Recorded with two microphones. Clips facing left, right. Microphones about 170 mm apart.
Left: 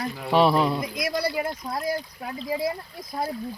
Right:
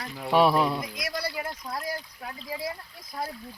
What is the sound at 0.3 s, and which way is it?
Speech, 5° right (ahead or behind).